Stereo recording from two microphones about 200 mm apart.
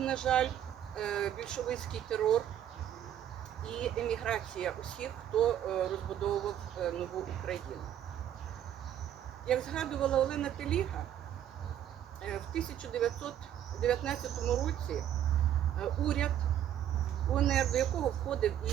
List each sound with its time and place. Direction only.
0.0 s speech: 5° left (ahead or behind)
3.7 s speech: 5° left (ahead or behind)
9.5 s speech: 5° left (ahead or behind)
12.2 s speech: 5° left (ahead or behind)
17.3 s speech: centre (ahead or behind)